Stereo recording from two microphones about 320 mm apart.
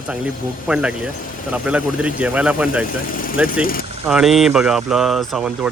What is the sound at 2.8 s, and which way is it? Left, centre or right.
Speech, left.